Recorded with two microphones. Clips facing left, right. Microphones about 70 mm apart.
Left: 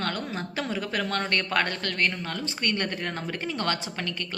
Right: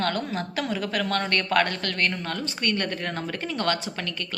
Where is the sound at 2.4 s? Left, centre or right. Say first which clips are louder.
Right 1 dB; left.